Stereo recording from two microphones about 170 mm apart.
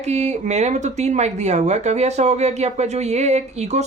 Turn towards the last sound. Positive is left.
turn(degrees=-40)  # may be behind; listen again after turning